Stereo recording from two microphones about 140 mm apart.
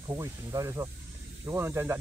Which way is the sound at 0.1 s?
25° right (ahead or behind).